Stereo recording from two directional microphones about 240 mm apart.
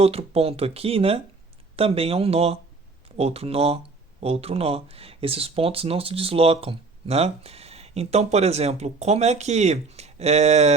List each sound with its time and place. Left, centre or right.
0.0 s speech: right